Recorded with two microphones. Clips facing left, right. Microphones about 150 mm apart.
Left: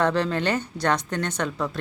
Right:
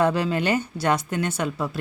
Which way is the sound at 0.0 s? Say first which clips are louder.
Right 1 dB; 10° right (ahead or behind).